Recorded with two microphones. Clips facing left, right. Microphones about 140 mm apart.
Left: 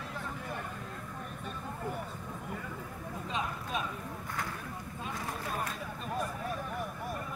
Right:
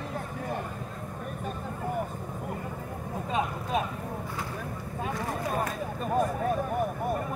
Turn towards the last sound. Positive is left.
turn(degrees=-50)  # may be behind; listen again after turning